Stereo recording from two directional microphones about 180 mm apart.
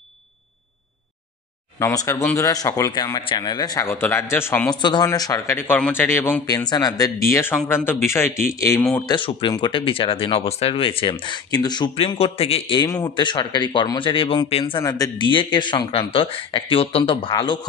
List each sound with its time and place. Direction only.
1.8 s speech: 15° left (ahead or behind)
4.7 s speech: 25° left (ahead or behind)